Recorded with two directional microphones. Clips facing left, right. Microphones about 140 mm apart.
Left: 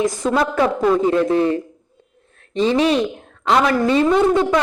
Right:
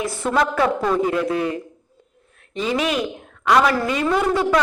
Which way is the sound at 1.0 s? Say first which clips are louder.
Left 5 dB; 30° left (ahead or behind).